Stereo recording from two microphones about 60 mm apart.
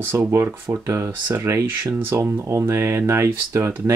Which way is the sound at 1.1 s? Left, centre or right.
Right.